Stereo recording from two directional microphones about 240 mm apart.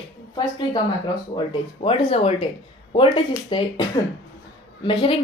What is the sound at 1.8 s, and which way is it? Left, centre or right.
Speech, left.